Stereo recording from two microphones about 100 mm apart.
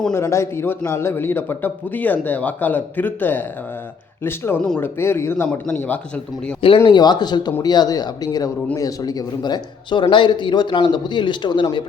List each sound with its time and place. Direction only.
0.1 s a man's voice: 30° left (ahead or behind)
6.8 s speech: 45° left (ahead or behind)